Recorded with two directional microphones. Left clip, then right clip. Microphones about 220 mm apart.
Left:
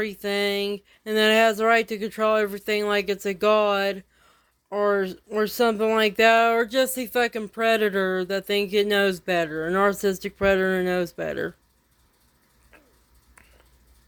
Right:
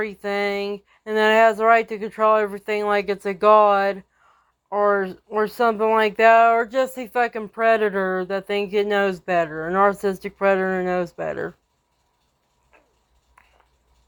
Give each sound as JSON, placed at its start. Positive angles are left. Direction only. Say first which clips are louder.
{"t": 0.0, "sound": "speech", "louder": "right 1 dB", "side_deg": 35}